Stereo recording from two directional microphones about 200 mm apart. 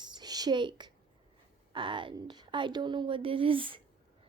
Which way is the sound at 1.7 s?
25° right (ahead or behind).